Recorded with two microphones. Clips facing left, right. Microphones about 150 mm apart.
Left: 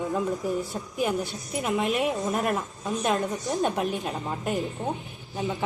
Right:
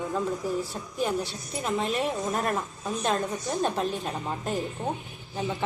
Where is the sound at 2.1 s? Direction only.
Centre (ahead or behind).